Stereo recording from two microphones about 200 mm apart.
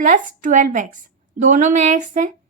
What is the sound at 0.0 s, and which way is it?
A woman's voice, 40° right (ahead or behind).